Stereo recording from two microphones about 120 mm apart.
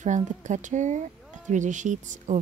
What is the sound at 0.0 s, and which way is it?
Speech, 85° right.